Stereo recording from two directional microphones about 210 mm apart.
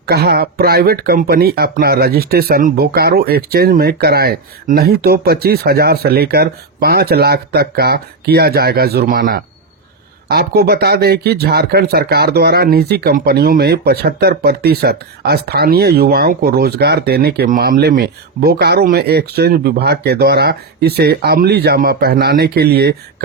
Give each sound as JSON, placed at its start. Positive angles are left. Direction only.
{"t": 0.0, "sound": "speech", "side_deg": -50}